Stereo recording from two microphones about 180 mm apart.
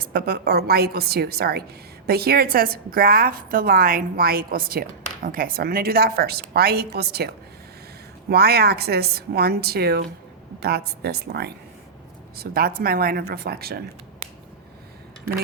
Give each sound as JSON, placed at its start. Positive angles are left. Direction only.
{"t": 0.0, "sound": "a woman's voice", "side_deg": -55}
{"t": 8.3, "sound": "a woman's voice", "side_deg": -60}